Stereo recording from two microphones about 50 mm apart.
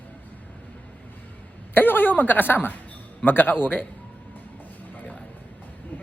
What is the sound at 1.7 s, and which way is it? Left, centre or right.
A woman's voice, left.